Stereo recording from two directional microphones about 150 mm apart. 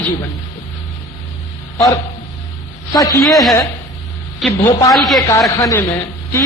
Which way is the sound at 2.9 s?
20° left (ahead or behind).